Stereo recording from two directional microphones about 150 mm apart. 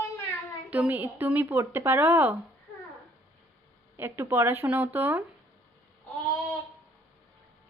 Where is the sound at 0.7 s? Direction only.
10° right (ahead or behind).